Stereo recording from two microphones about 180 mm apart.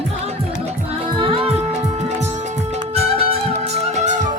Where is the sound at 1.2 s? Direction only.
30° right (ahead or behind).